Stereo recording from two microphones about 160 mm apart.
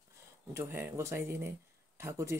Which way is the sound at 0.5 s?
15° right (ahead or behind).